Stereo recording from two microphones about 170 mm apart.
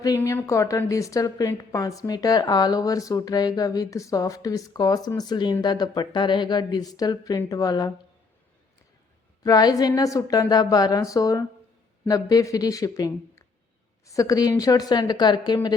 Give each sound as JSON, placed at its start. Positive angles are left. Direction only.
{"t": 0.0, "sound": "a woman's voice", "side_deg": 20}
{"t": 9.4, "sound": "a woman's voice", "side_deg": 20}